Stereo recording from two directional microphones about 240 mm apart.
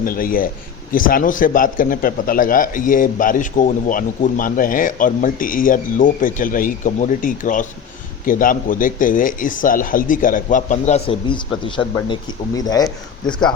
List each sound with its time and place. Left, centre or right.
0.0 s speech: left; by 12.9 s centre